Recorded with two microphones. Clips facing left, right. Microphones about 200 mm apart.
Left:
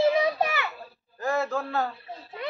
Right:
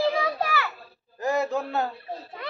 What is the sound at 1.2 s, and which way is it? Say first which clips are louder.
Speech: right 2 dB; 15° right (ahead or behind).